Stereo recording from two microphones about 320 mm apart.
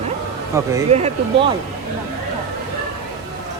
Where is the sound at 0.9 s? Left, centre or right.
Centre.